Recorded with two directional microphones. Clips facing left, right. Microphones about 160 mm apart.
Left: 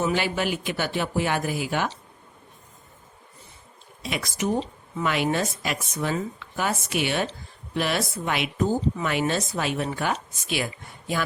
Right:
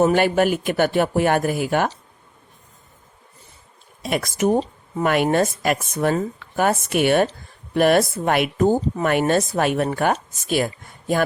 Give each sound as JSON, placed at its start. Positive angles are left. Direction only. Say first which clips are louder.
{"t": 0.0, "sound": "speech", "louder": "right 8 dB", "side_deg": -50}
{"t": 4.0, "sound": "speech", "louder": "right 7 dB", "side_deg": -50}